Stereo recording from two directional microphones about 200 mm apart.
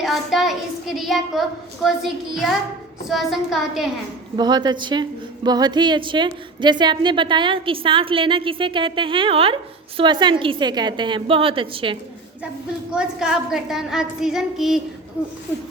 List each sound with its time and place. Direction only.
0.0 s a child's voice: centre (ahead or behind)
4.4 s a woman's voice: 20° right (ahead or behind)
12.9 s a child's voice: 5° right (ahead or behind)